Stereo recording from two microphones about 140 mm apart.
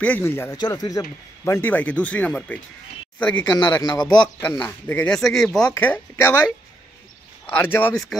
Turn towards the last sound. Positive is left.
turn(degrees=15)  # may be behind; listen again after turning